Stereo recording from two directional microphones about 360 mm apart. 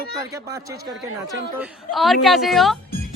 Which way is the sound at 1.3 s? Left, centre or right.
Centre.